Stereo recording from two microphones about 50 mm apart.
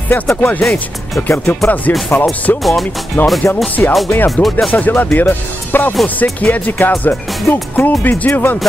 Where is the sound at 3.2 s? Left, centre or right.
Left.